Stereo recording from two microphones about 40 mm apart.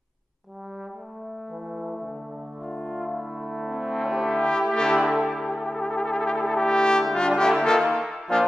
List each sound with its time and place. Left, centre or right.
1.7 s brass instrument: centre
2.7 s brass instrument: centre
4.4 s brass instrument: centre
4.9 s brass instrument: centre
5.4 s brass instrument: centre
7.9 s brass instrument: centre